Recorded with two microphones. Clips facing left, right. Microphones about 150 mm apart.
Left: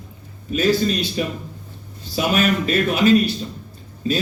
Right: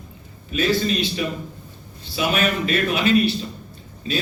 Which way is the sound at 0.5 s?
40° left (ahead or behind).